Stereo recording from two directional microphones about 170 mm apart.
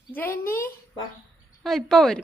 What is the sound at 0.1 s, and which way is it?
Speech, 10° left (ahead or behind).